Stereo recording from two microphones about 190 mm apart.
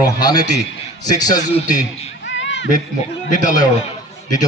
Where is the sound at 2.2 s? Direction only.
75° left (ahead or behind).